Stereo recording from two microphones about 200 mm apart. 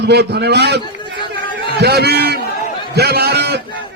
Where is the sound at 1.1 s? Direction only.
25° left (ahead or behind).